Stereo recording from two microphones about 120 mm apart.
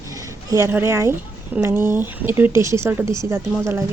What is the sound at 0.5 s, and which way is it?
Speech, 20° right (ahead or behind).